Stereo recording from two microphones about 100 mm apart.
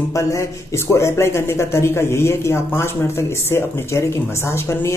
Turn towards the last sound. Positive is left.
turn(degrees=25)  # may be behind; listen again after turning